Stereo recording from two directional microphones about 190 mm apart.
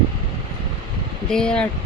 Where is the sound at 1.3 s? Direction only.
5° left (ahead or behind).